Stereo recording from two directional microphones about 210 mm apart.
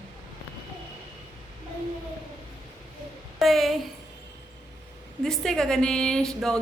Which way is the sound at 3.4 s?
Centre (ahead or behind).